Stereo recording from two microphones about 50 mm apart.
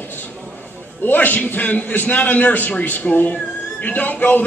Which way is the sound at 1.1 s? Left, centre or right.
Left.